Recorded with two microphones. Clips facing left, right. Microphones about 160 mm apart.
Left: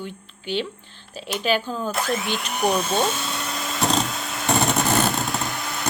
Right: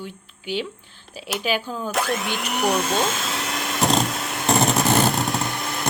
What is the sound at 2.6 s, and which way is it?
Speech, 90° right.